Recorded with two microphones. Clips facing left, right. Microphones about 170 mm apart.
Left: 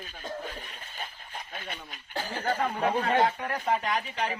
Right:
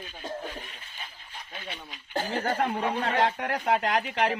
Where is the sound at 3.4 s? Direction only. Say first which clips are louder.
Right 3 dB; 75° right (ahead or behind).